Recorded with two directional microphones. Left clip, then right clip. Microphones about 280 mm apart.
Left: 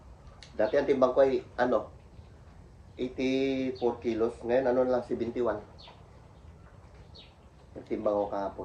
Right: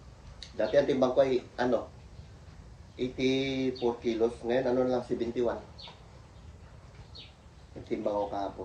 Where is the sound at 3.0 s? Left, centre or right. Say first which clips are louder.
Even; centre.